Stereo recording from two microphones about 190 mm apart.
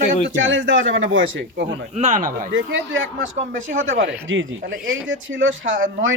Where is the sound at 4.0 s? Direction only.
75° right (ahead or behind).